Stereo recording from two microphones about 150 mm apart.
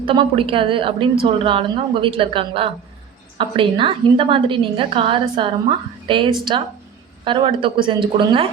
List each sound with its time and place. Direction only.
0.0 s a woman's voice: 35° right (ahead or behind)